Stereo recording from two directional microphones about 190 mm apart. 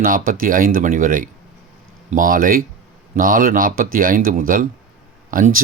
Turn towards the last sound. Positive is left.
turn(degrees=-45)  # may be behind; listen again after turning